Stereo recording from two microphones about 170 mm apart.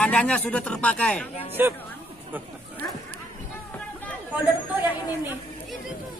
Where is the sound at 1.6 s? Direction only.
10° right (ahead or behind).